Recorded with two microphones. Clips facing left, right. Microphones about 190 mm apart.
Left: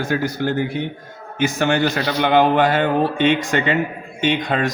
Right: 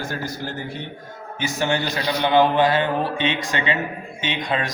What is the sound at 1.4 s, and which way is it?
Speech, 55° left (ahead or behind).